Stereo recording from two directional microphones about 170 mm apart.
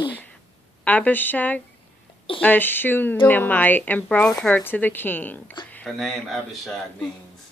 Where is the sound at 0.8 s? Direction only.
10° left (ahead or behind).